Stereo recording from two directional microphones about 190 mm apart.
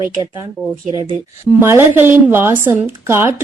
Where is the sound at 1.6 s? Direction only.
10° right (ahead or behind).